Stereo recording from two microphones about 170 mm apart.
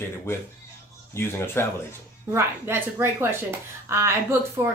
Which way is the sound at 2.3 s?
15° right (ahead or behind).